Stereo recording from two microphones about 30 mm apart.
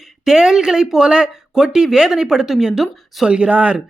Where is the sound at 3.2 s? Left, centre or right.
Right.